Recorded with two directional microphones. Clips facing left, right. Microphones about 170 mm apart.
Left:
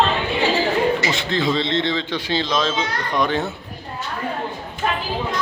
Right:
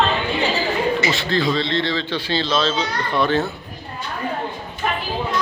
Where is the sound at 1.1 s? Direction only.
20° left (ahead or behind).